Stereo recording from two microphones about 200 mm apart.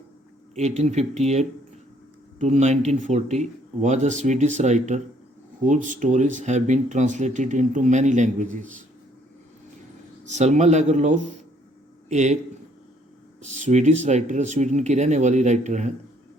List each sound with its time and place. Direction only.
0.5 s speech: 35° right (ahead or behind)
10.2 s speech: 35° right (ahead or behind)
13.4 s speech: 35° right (ahead or behind)